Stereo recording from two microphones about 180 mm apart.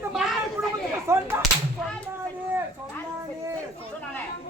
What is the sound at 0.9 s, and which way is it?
Speech, 15° right (ahead or behind).